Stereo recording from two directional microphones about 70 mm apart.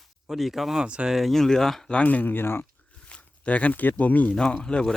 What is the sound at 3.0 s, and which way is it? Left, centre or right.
Speech, centre.